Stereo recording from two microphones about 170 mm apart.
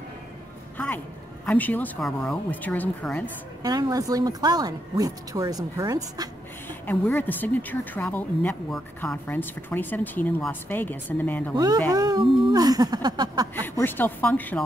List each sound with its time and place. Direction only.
0.7 s a woman's voice: 10° left (ahead or behind)
3.6 s speech: 20° right (ahead or behind)
6.9 s speech: 10° left (ahead or behind)
11.5 s speech: 25° right (ahead or behind)
13.6 s speech: 10° left (ahead or behind)